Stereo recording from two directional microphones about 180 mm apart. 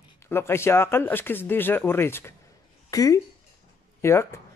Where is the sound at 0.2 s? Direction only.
15° left (ahead or behind).